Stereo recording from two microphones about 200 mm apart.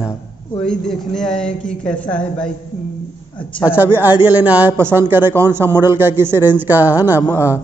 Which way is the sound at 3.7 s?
10° right (ahead or behind).